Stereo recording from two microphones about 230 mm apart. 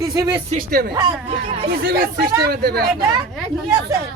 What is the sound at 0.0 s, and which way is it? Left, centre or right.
Speech, centre.